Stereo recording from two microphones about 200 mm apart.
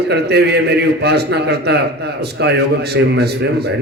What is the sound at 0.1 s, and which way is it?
A man's voice, 55° right (ahead or behind).